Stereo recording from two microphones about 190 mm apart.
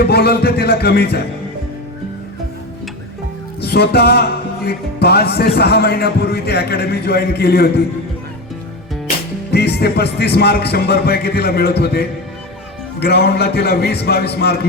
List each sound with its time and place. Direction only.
0.0 s speech: 55° left (ahead or behind)
3.6 s speech: 60° left (ahead or behind)
9.5 s speech: 60° left (ahead or behind)